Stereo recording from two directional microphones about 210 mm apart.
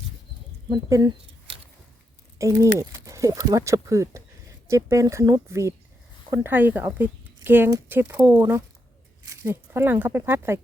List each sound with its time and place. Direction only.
0.7 s speech: 15° right (ahead or behind)
2.4 s speech: 15° right (ahead or behind)